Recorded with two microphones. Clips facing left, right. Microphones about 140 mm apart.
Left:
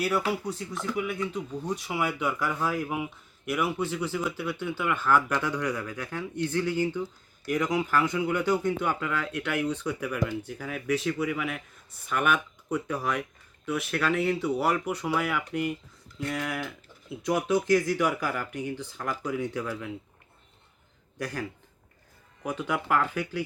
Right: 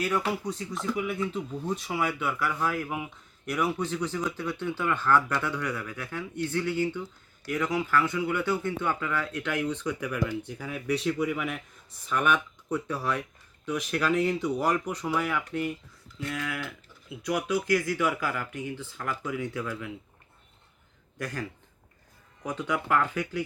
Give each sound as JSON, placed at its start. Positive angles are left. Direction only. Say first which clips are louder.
{"t": 0.0, "sound": "speech", "louder": "left 1 dB", "side_deg": 10}
{"t": 2.1, "sound": "speech", "louder": "left 1 dB", "side_deg": 15}
{"t": 3.4, "sound": "speech", "louder": "even", "side_deg": 5}
{"t": 10.9, "sound": "speech", "louder": "right 1 dB", "side_deg": 0}
{"t": 21.2, "sound": "speech", "louder": "left 1 dB", "side_deg": 10}
{"t": 22.4, "sound": "speech", "louder": "even", "side_deg": 10}